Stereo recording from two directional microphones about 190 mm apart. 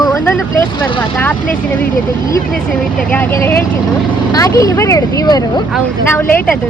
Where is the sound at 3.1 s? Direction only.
10° left (ahead or behind).